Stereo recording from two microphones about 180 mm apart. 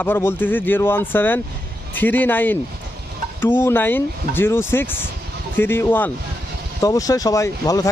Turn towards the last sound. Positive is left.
turn(degrees=20)  # may be behind; listen again after turning